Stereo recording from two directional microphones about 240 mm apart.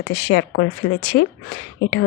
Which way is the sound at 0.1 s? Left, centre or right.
Left.